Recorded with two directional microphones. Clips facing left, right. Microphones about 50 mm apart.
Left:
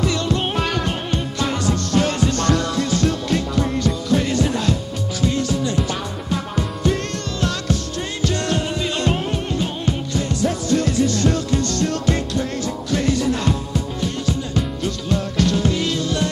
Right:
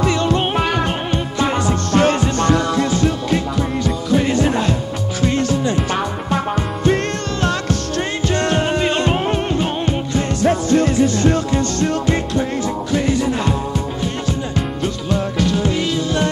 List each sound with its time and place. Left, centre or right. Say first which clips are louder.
0.0 s music: right 4 dB; right
2.3 s music: right 4 dB; right
4.3 s music: right 4 dB; right
5.2 s music: right 3 dB; right
8.3 s music: right 5 dB; right
9.0 s music: right 4 dB; right
15.7 s music: right 2 dB; centre